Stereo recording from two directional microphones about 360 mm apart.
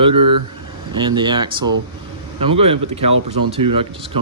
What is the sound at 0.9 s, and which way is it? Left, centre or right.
Speech, centre.